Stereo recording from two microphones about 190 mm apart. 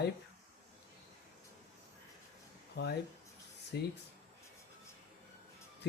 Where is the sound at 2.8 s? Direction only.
60° left (ahead or behind).